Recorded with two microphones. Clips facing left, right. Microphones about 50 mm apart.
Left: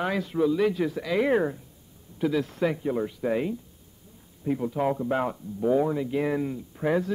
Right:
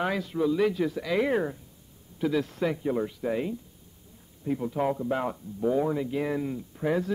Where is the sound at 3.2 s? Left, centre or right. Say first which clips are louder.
Left 3 dB; left.